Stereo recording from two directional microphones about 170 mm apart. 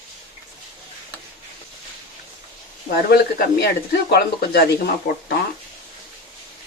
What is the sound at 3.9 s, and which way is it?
Speech, 75° left (ahead or behind).